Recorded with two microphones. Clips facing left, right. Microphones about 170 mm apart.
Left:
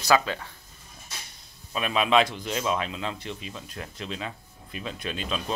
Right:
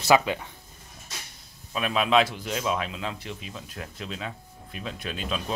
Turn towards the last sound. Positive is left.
turn(degrees=-5)  # may be behind; listen again after turning